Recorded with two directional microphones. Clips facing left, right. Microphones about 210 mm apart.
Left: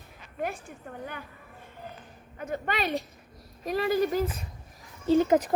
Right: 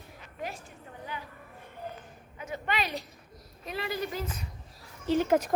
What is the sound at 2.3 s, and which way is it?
A woman's voice, 50° left (ahead or behind).